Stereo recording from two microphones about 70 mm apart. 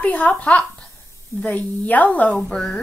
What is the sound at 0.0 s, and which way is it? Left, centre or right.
Speech, left.